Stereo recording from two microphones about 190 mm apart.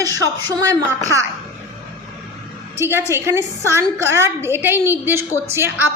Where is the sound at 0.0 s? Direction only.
20° right (ahead or behind).